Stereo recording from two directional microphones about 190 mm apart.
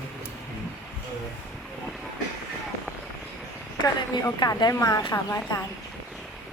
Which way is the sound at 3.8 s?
20° left (ahead or behind).